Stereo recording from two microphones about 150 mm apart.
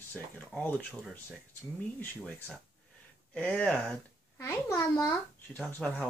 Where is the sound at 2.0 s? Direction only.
10° left (ahead or behind).